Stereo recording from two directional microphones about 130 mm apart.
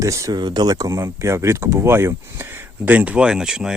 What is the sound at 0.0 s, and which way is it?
Speech, 25° right (ahead or behind).